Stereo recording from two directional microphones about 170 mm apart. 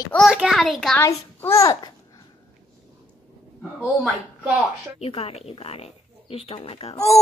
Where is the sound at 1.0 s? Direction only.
15° left (ahead or behind).